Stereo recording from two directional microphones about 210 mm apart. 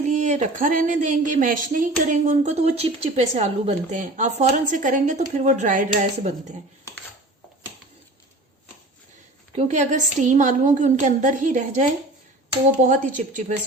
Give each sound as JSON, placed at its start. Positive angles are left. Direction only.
{"t": 0.0, "sound": "speech", "side_deg": -35}
{"t": 9.6, "sound": "speech", "side_deg": -35}
{"t": 12.9, "sound": "speech", "side_deg": -35}